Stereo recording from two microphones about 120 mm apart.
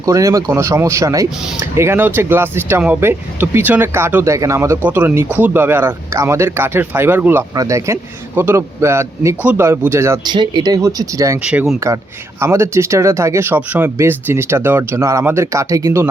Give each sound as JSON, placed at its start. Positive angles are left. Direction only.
{"t": 0.0, "sound": "speech", "side_deg": -30}
{"t": 7.5, "sound": "speech", "side_deg": -30}
{"t": 10.2, "sound": "speech", "side_deg": -40}